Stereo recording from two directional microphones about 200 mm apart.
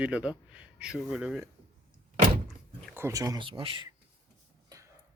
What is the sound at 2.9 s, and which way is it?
Speech, 10° right (ahead or behind).